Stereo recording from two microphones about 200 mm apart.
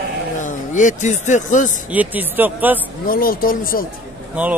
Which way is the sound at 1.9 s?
10° right (ahead or behind).